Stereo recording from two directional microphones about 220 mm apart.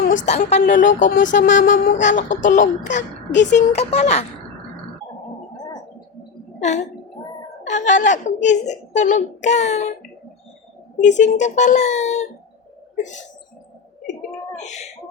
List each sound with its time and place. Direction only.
0.3 s a child's voice: 30° left (ahead or behind)
6.6 s a woman's voice: 30° left (ahead or behind)
10.9 s a child's voice: 35° left (ahead or behind)
14.5 s speech: 30° left (ahead or behind)